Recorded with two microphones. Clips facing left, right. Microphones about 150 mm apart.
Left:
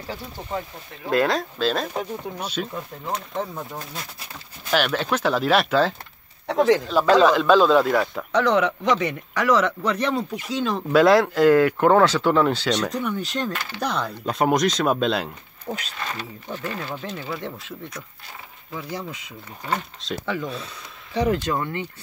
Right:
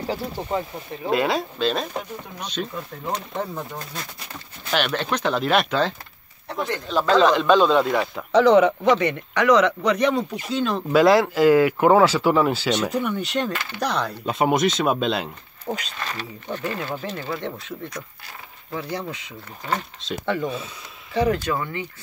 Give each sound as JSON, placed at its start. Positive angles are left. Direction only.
{"t": 0.0, "sound": "speech", "side_deg": -25}
{"t": 1.1, "sound": "speech", "side_deg": -5}
{"t": 6.4, "sound": "speech", "side_deg": 90}
{"t": 6.9, "sound": "speech", "side_deg": 5}